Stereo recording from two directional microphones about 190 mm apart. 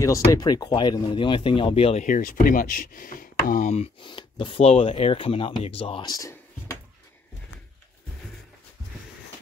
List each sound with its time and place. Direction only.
0.0 s speech: 15° left (ahead or behind)